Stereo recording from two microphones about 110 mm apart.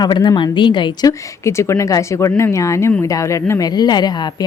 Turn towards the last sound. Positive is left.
turn(degrees=40)  # may be behind; listen again after turning